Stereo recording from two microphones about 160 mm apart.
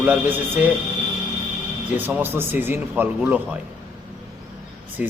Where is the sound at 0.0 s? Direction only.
10° right (ahead or behind).